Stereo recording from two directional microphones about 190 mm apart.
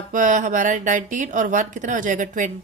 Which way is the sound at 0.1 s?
40° right (ahead or behind).